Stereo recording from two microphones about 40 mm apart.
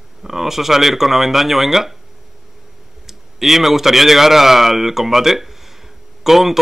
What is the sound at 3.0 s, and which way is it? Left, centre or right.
A man's voice, centre.